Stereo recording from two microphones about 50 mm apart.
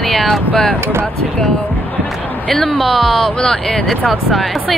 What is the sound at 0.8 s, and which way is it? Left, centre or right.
Speech, right.